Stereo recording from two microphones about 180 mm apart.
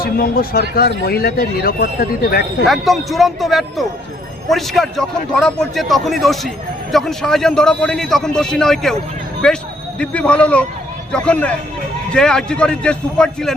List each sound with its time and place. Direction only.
0.0 s speech: 55° left (ahead or behind)
2.6 s a man's voice: centre (ahead or behind)